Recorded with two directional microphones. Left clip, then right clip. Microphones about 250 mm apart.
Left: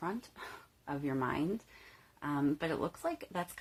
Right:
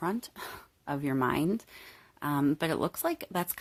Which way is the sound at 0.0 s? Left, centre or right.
Right.